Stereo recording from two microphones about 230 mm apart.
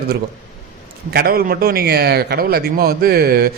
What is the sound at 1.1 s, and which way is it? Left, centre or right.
Speech, right.